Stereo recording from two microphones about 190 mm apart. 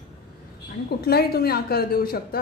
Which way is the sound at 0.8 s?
55° left (ahead or behind).